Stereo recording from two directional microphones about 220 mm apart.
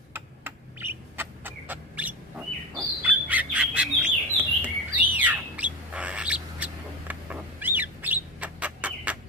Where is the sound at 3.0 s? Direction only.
5° right (ahead or behind).